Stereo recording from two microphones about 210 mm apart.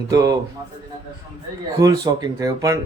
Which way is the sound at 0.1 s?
15° right (ahead or behind).